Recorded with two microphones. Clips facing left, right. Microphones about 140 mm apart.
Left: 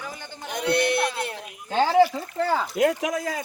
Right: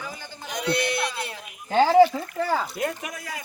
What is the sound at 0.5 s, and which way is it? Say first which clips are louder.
Speech: left 3 dB; 55° left (ahead or behind).